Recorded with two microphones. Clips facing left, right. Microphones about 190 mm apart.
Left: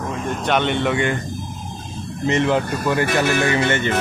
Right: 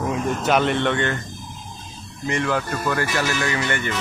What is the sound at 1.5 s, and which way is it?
Vehicle, 45° left (ahead or behind).